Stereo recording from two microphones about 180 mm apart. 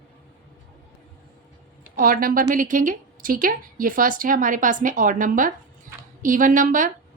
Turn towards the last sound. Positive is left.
turn(degrees=-45)  # may be behind; listen again after turning